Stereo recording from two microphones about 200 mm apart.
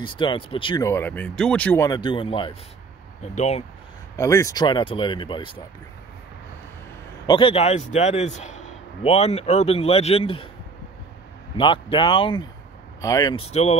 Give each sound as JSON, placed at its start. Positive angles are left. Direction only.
{"t": 0.0, "sound": "speech", "side_deg": 25}
{"t": 1.9, "sound": "a man's voice", "side_deg": 25}
{"t": 4.2, "sound": "speech", "side_deg": 15}
{"t": 7.2, "sound": "a man's voice", "side_deg": 25}
{"t": 11.5, "sound": "speech", "side_deg": 25}